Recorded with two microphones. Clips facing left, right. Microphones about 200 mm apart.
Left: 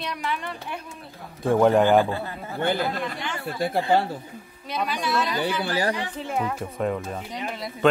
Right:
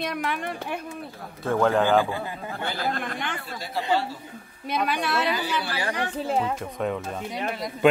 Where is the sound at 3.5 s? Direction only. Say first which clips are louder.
Left 5 dB; 55° left (ahead or behind).